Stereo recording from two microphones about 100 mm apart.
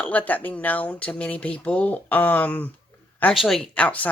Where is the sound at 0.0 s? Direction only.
15° left (ahead or behind).